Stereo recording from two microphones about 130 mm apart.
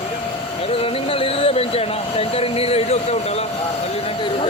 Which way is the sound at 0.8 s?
45° left (ahead or behind).